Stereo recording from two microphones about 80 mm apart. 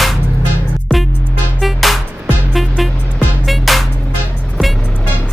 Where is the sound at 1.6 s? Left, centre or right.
Centre.